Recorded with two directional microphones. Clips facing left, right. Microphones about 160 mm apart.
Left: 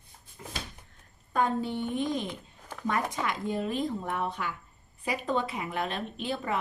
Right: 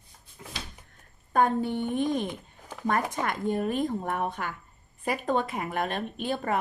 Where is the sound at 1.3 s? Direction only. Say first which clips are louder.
Right 4 dB; 55° right (ahead or behind).